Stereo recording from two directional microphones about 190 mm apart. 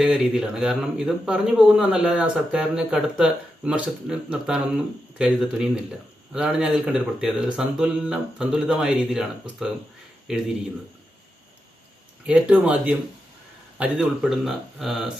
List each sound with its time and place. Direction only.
0.0 s speech: centre (ahead or behind)
12.2 s speech: 5° right (ahead or behind)